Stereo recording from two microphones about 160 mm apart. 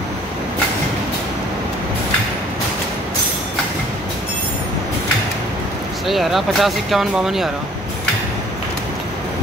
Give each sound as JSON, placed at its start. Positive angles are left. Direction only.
{"t": 6.0, "sound": "speech", "side_deg": 0}